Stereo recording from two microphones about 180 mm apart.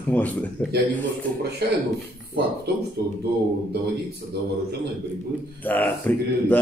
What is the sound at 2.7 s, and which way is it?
Speech, 65° right (ahead or behind).